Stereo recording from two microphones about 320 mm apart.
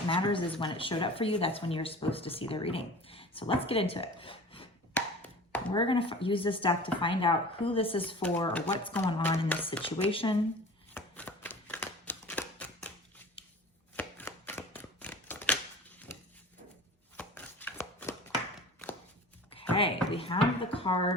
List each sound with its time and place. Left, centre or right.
0.1 s speech: centre
4.9 s tap: centre
5.7 s speech: centre
8.2 s speech: centre
10.9 s a sound: centre
17.2 s chopping: centre
19.7 s a sound: centre